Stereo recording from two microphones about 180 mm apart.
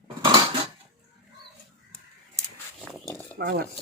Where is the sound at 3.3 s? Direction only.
65° right (ahead or behind).